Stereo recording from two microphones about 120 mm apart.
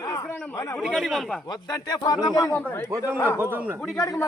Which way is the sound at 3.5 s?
15° right (ahead or behind).